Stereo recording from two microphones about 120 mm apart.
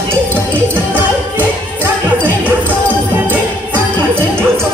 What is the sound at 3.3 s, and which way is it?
Music, 15° right (ahead or behind).